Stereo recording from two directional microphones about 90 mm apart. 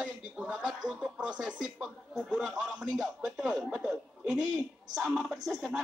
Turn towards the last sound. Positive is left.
turn(degrees=0)  # may be behind; listen again after turning